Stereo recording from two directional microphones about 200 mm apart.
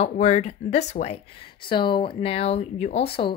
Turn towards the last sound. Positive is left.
turn(degrees=30)  # may be behind; listen again after turning